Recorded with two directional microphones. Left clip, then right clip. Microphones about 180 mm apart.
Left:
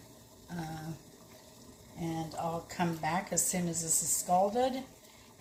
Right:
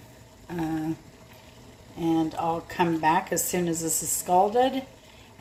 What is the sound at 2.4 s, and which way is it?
Speech, 40° right (ahead or behind).